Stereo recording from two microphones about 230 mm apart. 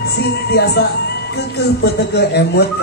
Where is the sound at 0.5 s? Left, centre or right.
Left.